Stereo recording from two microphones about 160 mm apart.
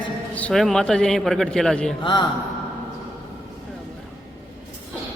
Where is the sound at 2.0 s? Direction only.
30° left (ahead or behind).